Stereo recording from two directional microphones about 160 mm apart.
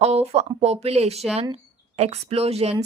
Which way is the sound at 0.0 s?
40° right (ahead or behind).